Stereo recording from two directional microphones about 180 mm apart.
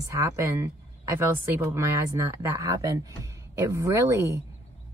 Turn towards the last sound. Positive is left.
turn(degrees=-15)  # may be behind; listen again after turning